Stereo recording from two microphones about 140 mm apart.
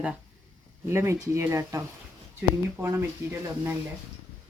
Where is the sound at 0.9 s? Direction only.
20° right (ahead or behind).